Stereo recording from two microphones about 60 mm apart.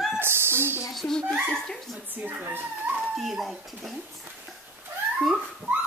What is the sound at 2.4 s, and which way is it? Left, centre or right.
Speech, right.